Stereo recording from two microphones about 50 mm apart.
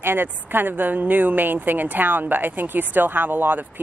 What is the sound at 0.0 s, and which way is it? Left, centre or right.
A woman's voice, right.